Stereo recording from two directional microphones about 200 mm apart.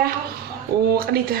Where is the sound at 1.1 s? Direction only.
50° right (ahead or behind).